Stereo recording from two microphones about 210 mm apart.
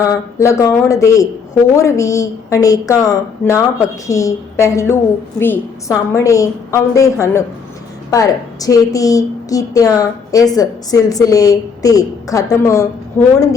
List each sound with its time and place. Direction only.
0.0 s a woman's voice: 15° left (ahead or behind)